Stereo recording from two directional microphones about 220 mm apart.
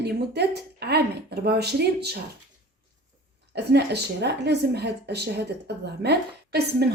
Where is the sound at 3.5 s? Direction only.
50° right (ahead or behind).